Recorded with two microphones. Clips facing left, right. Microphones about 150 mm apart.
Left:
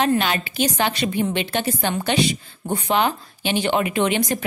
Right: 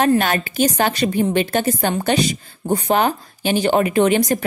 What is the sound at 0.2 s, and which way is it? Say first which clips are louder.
Speech: right 4 dB; 45° right (ahead or behind).